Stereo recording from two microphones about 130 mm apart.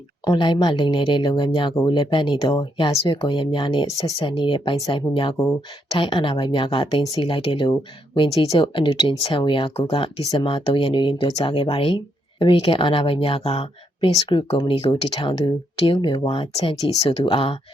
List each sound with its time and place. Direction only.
0.3 s speech: 35° left (ahead or behind)
3.8 s speech: 25° left (ahead or behind)
4.2 s speech: 40° left (ahead or behind)
14.2 s speech: 40° left (ahead or behind)